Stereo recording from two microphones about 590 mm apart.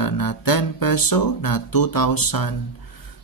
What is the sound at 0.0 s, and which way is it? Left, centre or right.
Speech, left.